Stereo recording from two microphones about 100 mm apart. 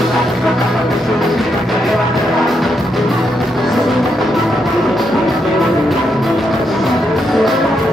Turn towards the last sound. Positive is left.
turn(degrees=0)  # may be behind; listen again after turning